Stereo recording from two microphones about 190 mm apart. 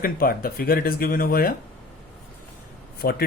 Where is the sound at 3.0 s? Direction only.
55° left (ahead or behind).